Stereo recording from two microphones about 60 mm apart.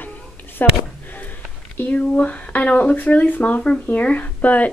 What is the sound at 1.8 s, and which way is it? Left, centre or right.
Speech, left.